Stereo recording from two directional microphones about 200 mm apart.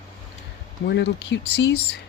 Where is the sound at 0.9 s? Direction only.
60° left (ahead or behind).